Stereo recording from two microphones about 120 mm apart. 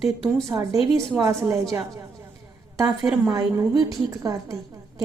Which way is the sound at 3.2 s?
25° right (ahead or behind).